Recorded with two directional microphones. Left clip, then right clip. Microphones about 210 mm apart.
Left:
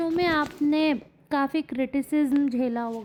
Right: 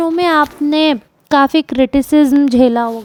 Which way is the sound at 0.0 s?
35° right (ahead or behind).